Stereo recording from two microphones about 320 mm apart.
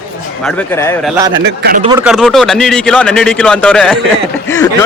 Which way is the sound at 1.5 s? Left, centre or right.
Right.